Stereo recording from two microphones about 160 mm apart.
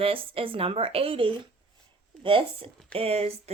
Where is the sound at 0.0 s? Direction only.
35° right (ahead or behind).